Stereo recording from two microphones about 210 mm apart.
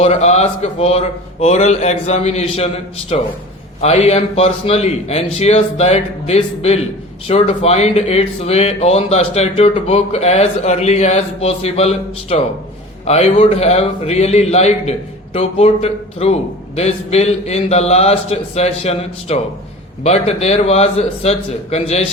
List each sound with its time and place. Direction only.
0.0 s a man's voice: 30° left (ahead or behind)